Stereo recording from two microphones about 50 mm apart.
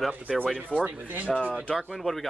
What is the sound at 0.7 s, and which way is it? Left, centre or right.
Speech, right.